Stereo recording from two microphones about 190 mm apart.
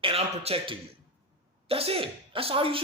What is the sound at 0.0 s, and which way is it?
Speech, 30° right (ahead or behind).